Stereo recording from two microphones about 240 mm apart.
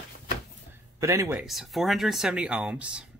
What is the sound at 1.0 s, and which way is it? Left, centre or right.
Speech, centre.